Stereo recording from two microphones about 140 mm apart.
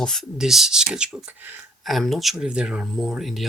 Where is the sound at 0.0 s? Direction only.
5° left (ahead or behind).